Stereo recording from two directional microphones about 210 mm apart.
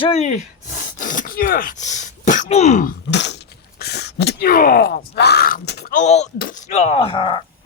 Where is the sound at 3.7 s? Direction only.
50° left (ahead or behind).